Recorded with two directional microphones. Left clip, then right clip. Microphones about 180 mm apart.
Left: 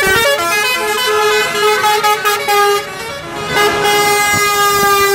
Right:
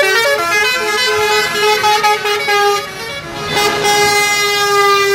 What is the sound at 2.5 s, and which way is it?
Vehicle, 50° left (ahead or behind).